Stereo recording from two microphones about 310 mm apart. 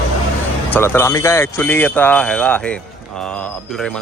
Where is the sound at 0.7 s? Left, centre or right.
Centre.